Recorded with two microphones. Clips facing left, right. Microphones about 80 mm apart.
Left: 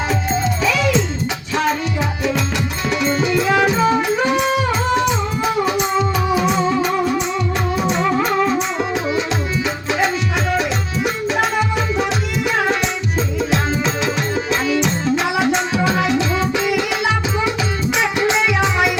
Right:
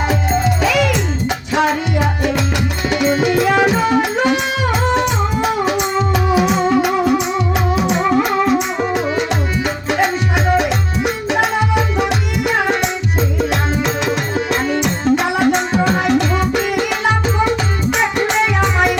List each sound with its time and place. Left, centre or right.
0.1 s music: right
7.8 s music: centre
11.3 s music: right
13.5 s music: right